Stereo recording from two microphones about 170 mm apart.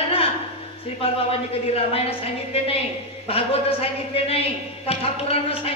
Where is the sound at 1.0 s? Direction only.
35° left (ahead or behind).